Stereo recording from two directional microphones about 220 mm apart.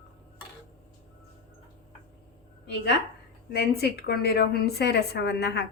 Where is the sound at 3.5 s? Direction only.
45° left (ahead or behind).